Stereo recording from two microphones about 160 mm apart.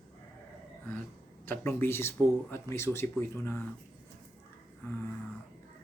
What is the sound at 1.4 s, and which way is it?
Speech, 15° left (ahead or behind).